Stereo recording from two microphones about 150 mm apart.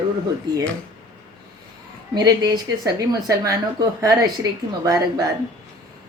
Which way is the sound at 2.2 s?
25° right (ahead or behind).